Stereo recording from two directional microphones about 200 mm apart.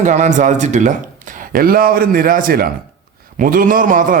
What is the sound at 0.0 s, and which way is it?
A man's voice, 35° right (ahead or behind).